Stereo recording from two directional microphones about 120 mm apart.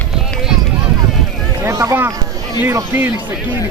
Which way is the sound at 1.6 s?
25° right (ahead or behind).